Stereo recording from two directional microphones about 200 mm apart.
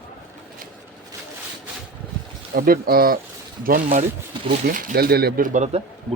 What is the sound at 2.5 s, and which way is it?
Speech, 45° right (ahead or behind).